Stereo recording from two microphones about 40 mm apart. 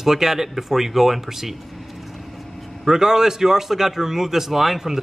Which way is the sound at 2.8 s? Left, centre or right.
Centre.